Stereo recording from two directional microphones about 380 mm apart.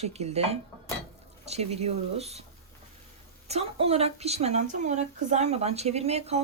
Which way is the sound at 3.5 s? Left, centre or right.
Centre.